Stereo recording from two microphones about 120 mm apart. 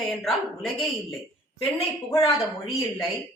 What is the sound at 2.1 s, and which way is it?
Speech, 25° left (ahead or behind).